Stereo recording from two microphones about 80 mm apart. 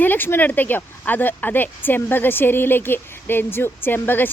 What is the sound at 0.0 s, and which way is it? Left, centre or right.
Speech, left.